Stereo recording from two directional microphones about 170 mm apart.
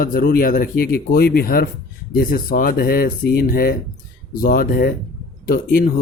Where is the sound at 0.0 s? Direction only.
55° left (ahead or behind).